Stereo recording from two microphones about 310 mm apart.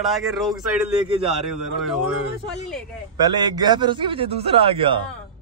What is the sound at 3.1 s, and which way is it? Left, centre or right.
A man's voice, centre.